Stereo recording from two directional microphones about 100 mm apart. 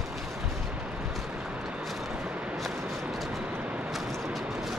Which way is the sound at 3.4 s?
15° right (ahead or behind).